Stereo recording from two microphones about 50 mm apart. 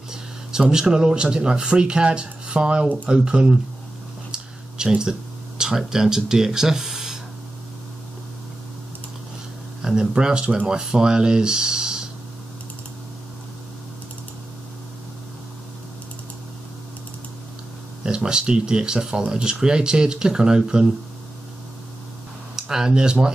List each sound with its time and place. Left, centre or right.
0.1 s speech: centre
4.3 s a sound: centre
5.6 s speech: centre
9.8 s speech: centre
18.0 s speech: centre
22.6 s speech: centre